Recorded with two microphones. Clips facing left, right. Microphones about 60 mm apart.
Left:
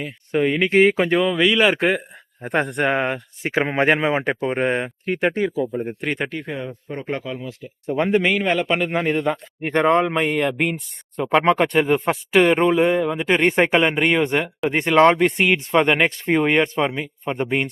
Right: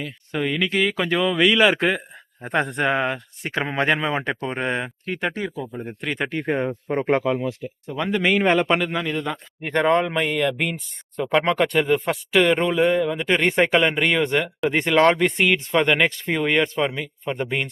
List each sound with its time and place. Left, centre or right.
0.3 s speech: left
0.6 s speech: left
1.4 s speech: centre
1.6 s speech: centre
3.4 s speech: centre
6.4 s speech: right
6.7 s speech: right
7.9 s speech: left
8.4 s a man's voice: centre
9.0 s speech: left
9.2 s speech: left
9.7 s speech: centre